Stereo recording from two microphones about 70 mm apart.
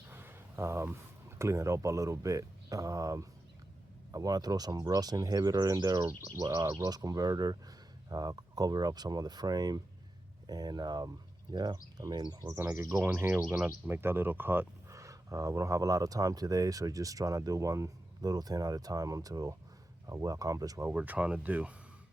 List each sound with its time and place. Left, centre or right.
0.1 s a sound: right
1.4 s speech: right
13.1 s speech: right
14.8 s speech: right
20.1 s speech: right
20.9 s speech: right